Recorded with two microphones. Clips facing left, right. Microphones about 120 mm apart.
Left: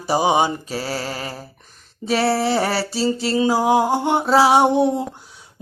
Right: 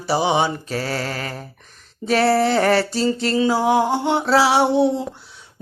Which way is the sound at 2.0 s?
Centre (ahead or behind).